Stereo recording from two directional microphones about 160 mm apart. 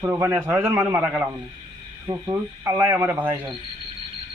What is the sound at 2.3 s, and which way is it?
Speech, 15° right (ahead or behind).